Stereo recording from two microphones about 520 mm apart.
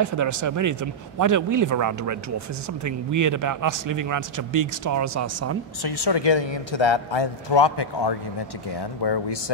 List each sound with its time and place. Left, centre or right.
0.0 s a man's voice: right
5.8 s a woman's voice: left